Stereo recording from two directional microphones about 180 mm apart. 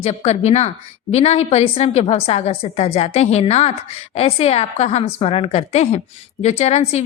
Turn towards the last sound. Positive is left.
turn(degrees=35)  # may be behind; listen again after turning